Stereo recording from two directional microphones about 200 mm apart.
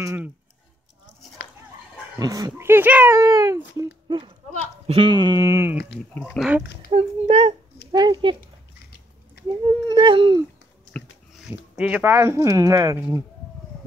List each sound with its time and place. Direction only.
0.0 s speech: 10° right (ahead or behind)
1.4 s dog: 55° left (ahead or behind)
2.1 s speech: 20° right (ahead or behind)
4.5 s speech: 30° right (ahead or behind); by 5.8 s 15° right (ahead or behind)
6.1 s speech: centre (ahead or behind)
6.9 s speech: 30° right (ahead or behind)
9.9 s speech: 25° right (ahead or behind)
10.9 s speech: centre (ahead or behind)